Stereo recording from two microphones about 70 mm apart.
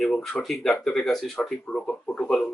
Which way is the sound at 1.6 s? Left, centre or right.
Centre.